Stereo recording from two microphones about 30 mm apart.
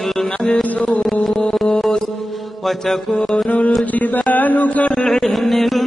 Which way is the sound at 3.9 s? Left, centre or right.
Left.